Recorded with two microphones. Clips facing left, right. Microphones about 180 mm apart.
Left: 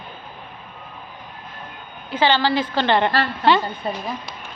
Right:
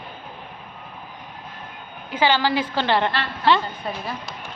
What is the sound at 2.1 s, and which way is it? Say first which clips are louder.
A woman's voice: left 1 dB; 10° right (ahead or behind).